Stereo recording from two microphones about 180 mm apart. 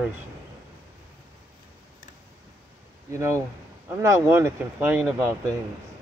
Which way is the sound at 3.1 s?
15° right (ahead or behind).